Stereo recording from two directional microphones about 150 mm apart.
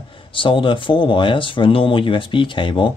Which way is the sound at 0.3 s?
35° left (ahead or behind).